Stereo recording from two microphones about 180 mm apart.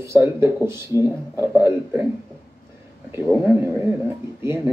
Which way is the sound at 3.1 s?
10° right (ahead or behind).